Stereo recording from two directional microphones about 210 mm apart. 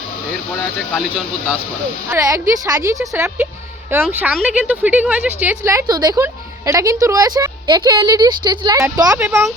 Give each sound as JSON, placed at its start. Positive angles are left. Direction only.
{"t": 2.0, "sound": "speech", "side_deg": -15}